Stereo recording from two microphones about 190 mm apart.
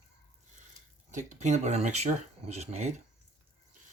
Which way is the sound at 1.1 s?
40° right (ahead or behind).